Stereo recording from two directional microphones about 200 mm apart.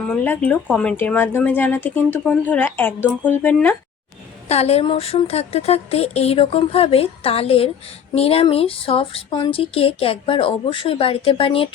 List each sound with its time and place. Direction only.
0.3 s speech: 5° left (ahead or behind)
4.4 s speech: 30° left (ahead or behind)